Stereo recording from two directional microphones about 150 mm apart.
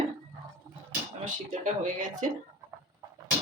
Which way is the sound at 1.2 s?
60° right (ahead or behind).